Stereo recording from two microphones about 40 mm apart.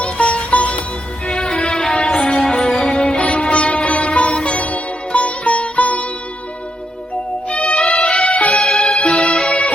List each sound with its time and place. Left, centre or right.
0.0 s music: left
7.5 s music: left
7.8 s music: centre
8.2 s music: left
8.5 s music: centre
9.5 s music: left